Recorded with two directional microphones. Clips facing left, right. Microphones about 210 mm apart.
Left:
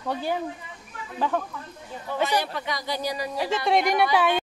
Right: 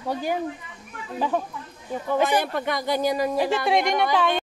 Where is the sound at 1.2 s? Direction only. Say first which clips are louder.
Right 1 dB; 15° right (ahead or behind).